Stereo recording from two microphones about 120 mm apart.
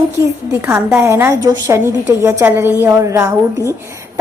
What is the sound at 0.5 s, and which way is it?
A woman's voice, 20° right (ahead or behind).